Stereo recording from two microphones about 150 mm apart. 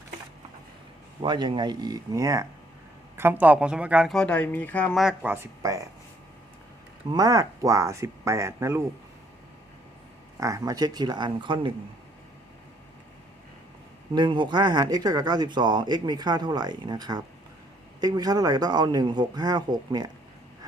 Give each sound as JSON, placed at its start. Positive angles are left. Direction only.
{"t": 1.2, "sound": "speech", "side_deg": -30}
{"t": 4.1, "sound": "speech", "side_deg": 5}
{"t": 5.3, "sound": "speech", "side_deg": -20}
{"t": 7.1, "sound": "speech", "side_deg": -25}
{"t": 10.4, "sound": "speech", "side_deg": -20}
{"t": 14.2, "sound": "speech", "side_deg": -30}